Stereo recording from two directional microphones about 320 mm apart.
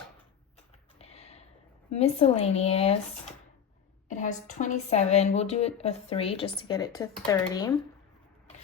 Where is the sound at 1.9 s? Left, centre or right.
Centre.